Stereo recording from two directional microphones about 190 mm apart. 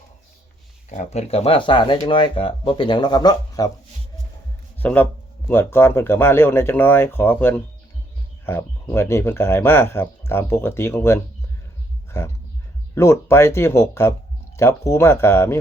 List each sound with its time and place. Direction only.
0.9 s speech: 35° left (ahead or behind); by 3.7 s 20° left (ahead or behind)
4.8 s a man's voice: 10° left (ahead or behind)
12.0 s a sound: 15° left (ahead or behind)
12.9 s speech: 15° left (ahead or behind)